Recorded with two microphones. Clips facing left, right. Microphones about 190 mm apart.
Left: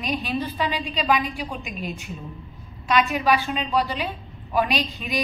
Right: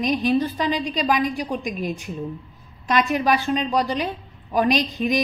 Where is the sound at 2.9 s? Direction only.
45° right (ahead or behind).